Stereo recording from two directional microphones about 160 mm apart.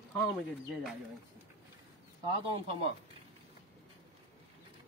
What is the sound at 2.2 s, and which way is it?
Speech, 30° right (ahead or behind).